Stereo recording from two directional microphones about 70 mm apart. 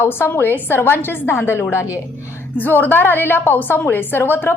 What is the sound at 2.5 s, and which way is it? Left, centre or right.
A woman's voice, left.